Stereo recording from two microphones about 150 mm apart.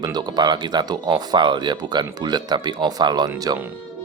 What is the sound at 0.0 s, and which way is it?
Speech, 25° right (ahead or behind).